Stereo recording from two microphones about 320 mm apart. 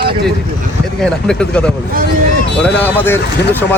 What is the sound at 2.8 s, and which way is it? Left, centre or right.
Speech, centre.